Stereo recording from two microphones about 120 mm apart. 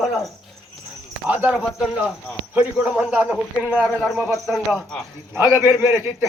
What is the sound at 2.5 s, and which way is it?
A man's voice, 10° right (ahead or behind).